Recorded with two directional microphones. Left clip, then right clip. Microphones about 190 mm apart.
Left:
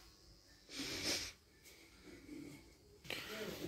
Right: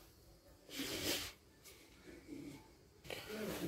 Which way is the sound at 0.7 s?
15° right (ahead or behind).